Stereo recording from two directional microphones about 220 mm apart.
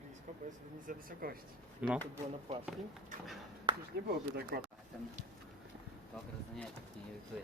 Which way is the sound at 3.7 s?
20° right (ahead or behind).